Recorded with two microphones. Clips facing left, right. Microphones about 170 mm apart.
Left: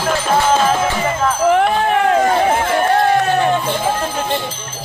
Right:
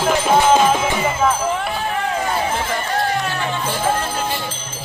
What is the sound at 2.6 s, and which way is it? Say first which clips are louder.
Chatter: left 7 dB; 60° left (ahead or behind).